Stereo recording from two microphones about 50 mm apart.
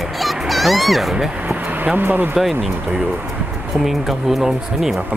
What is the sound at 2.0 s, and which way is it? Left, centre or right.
Speech, right.